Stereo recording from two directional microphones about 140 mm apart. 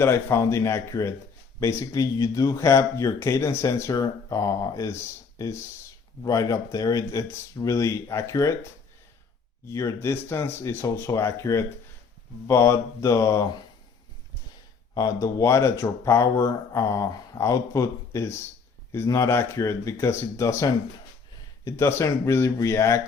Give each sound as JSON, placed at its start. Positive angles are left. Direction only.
{"t": 0.0, "sound": "speech", "side_deg": 20}
{"t": 6.2, "sound": "speech", "side_deg": 25}
{"t": 9.6, "sound": "speech", "side_deg": 20}
{"t": 14.9, "sound": "speech", "side_deg": 25}